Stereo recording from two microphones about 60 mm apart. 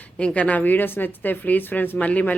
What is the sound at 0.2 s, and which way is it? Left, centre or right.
Speech, left.